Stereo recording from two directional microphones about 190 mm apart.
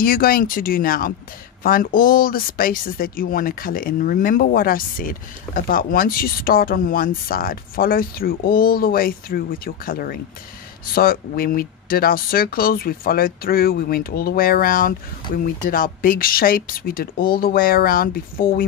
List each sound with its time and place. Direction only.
0.0 s speech: 50° left (ahead or behind)